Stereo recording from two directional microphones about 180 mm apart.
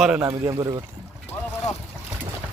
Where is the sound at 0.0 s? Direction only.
5° right (ahead or behind).